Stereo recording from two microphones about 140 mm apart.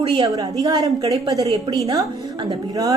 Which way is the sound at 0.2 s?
25° right (ahead or behind).